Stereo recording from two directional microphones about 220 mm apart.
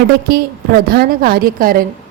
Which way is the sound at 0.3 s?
45° right (ahead or behind).